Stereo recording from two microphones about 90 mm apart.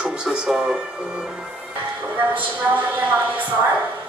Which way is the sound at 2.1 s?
20° right (ahead or behind).